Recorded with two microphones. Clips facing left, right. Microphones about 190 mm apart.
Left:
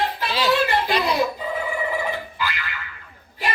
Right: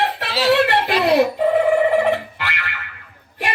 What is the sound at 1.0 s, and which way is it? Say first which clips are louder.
Boing: right 7 dB; 70° right (ahead or behind).